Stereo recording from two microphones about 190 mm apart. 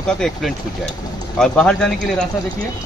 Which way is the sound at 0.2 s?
Centre (ahead or behind).